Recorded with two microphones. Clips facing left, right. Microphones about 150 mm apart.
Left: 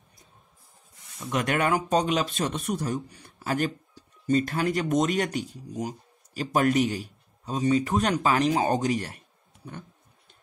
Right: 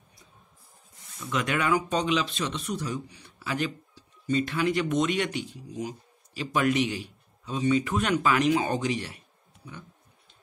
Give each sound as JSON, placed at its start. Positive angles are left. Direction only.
{"t": 1.3, "sound": "speech", "side_deg": 45}